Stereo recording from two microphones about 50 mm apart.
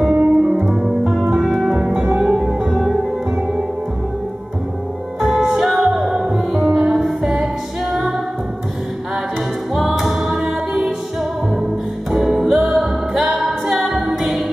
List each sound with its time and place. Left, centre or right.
0.0 s music: centre
2.7 s music: centre
5.2 s music: centre
9.8 s music: centre